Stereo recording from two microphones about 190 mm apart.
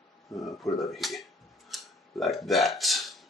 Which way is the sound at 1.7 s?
Centre (ahead or behind).